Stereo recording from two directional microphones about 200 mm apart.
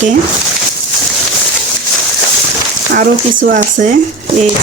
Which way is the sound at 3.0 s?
45° right (ahead or behind).